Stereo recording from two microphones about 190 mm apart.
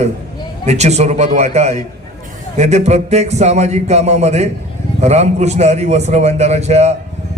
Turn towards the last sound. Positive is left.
turn(degrees=-35)  # may be behind; listen again after turning